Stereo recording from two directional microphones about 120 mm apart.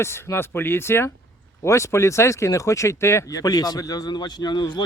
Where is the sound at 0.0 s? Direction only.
20° left (ahead or behind).